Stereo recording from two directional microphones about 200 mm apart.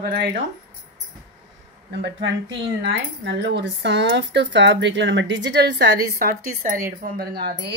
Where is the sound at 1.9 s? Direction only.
60° right (ahead or behind).